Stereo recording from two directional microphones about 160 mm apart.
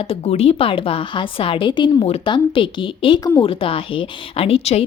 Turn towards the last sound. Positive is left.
turn(degrees=40)  # may be behind; listen again after turning